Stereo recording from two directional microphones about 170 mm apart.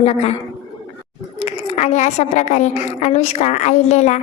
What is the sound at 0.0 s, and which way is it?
Speech, 40° left (ahead or behind).